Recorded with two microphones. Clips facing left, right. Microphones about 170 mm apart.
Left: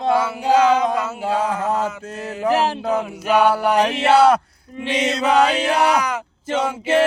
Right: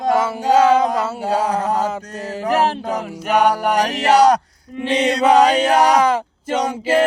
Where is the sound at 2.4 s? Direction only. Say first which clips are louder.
Even; 50° right (ahead or behind).